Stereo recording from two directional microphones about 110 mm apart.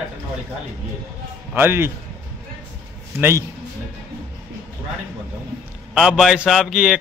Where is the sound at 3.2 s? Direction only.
20° right (ahead or behind).